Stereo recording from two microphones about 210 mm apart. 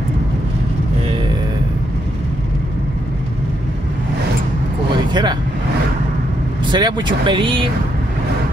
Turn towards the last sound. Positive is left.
turn(degrees=-25)  # may be behind; listen again after turning